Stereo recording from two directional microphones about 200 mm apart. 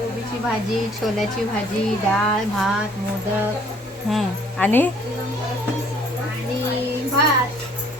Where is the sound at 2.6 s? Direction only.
Centre (ahead or behind).